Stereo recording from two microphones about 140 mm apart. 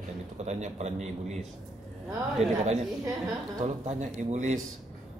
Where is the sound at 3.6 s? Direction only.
50° right (ahead or behind).